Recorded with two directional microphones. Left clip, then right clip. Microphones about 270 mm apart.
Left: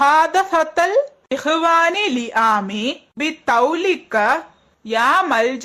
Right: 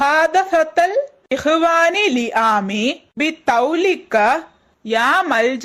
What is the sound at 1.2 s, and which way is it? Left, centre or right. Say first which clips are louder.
A woman's voice: right 1 dB; centre.